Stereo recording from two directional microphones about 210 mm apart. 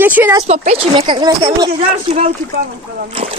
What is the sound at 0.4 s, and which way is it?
Speech, 30° right (ahead or behind).